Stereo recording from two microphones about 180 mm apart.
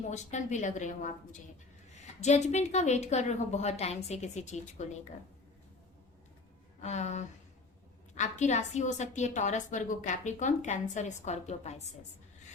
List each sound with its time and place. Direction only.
0.0 s a woman's voice: 40° left (ahead or behind)
6.8 s a woman's voice: 40° left (ahead or behind)